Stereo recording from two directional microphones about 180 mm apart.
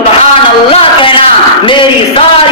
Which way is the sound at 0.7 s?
30° left (ahead or behind).